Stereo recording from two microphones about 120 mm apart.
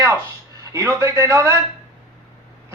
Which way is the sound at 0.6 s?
25° right (ahead or behind).